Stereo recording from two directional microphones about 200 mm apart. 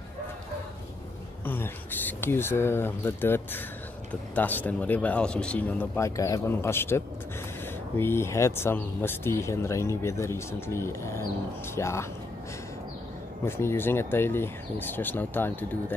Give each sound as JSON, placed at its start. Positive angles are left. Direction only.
{"t": 1.4, "sound": "speech", "side_deg": 10}
{"t": 8.0, "sound": "speech", "side_deg": 10}
{"t": 13.5, "sound": "speech", "side_deg": 10}